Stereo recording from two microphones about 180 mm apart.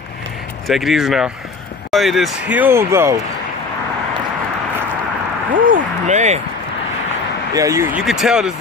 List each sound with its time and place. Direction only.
0.7 s speech: centre (ahead or behind)
5.5 s speech: 50° right (ahead or behind)
7.5 s speech: 15° right (ahead or behind)
8.0 s speech: centre (ahead or behind)